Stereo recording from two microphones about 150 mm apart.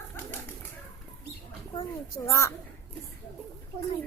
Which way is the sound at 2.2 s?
20° left (ahead or behind).